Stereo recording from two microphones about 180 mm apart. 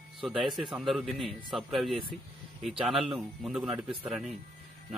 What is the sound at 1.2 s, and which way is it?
Speech, 30° right (ahead or behind).